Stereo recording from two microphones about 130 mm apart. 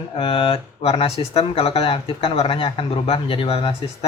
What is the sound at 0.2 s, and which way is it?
Speech, 45° left (ahead or behind).